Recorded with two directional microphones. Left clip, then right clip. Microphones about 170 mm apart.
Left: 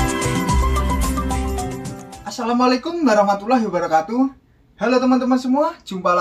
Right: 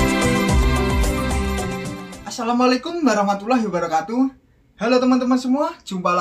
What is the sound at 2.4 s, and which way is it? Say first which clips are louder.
A man's voice: left 1 dB; 15° right (ahead or behind).